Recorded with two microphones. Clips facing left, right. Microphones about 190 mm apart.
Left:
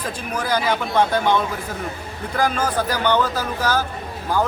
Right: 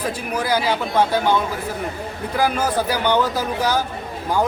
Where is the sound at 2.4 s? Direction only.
10° right (ahead or behind).